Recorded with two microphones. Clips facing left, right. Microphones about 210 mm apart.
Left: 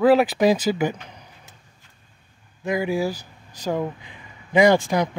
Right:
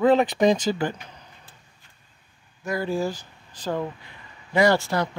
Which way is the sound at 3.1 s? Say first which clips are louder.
Left 2 dB; 40° left (ahead or behind).